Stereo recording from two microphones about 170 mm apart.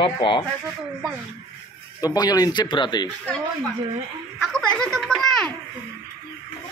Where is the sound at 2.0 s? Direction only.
25° left (ahead or behind).